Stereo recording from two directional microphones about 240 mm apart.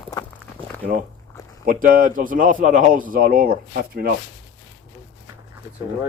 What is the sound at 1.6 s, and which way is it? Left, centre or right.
Speech, right.